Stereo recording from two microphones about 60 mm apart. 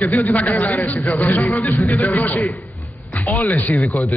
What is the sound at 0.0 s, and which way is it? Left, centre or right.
Speech, left.